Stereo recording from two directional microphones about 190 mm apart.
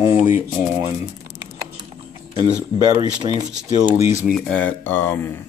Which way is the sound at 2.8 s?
20° right (ahead or behind).